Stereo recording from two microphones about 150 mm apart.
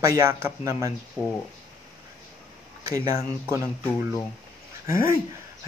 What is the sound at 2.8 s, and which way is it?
Speech, 20° right (ahead or behind).